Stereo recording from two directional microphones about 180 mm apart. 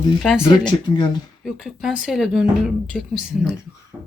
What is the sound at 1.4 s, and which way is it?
A woman's voice, centre (ahead or behind).